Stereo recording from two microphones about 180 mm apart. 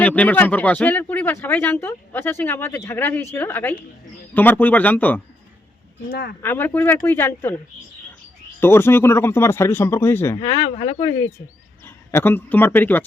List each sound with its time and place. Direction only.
0.0 s speech: 10° left (ahead or behind)
6.1 s speech: 65° left (ahead or behind)
6.4 s speech: 10° left (ahead or behind)
8.6 s speech: 10° left (ahead or behind)